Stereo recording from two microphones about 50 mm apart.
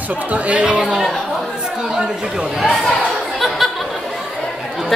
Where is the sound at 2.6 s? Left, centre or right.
Centre.